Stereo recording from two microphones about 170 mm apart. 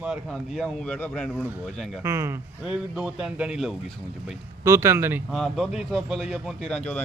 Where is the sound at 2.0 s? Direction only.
15° right (ahead or behind).